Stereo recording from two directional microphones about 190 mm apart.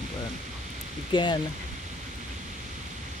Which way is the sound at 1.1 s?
25° left (ahead or behind).